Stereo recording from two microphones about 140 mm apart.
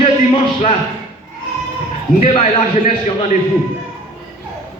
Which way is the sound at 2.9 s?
50° left (ahead or behind).